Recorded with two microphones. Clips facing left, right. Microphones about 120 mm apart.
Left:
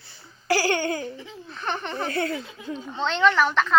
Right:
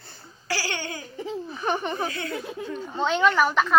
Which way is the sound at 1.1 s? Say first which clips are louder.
Right 9 dB; 40° right (ahead or behind).